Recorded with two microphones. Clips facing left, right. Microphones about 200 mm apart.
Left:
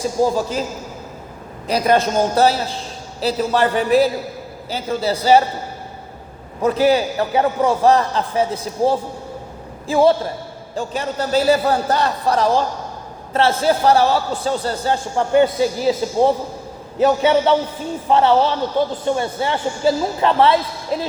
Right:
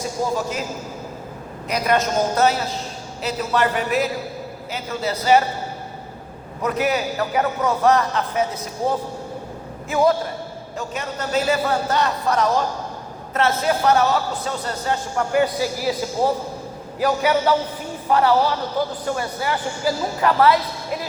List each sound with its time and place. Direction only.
1.6 s a man's voice: 30° left (ahead or behind)
6.6 s a man's voice: 30° left (ahead or behind)